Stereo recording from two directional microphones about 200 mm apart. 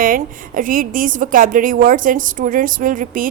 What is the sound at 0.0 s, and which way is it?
A woman's voice, 45° right (ahead or behind).